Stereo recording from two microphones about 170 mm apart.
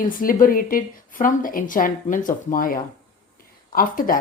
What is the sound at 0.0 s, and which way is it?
Speech, 55° left (ahead or behind).